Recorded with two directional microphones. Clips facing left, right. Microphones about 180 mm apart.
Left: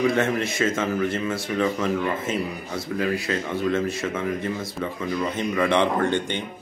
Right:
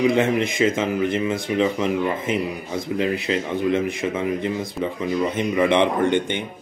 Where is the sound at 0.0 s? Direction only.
15° right (ahead or behind).